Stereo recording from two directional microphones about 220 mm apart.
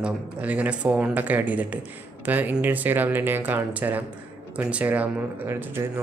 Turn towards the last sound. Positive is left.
turn(degrees=-10)  # may be behind; listen again after turning